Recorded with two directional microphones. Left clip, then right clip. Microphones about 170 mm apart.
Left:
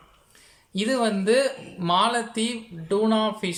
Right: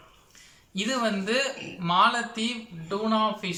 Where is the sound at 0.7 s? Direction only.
30° left (ahead or behind).